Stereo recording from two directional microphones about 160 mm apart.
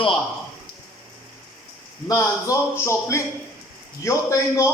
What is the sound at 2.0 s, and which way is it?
A man's voice, 20° left (ahead or behind).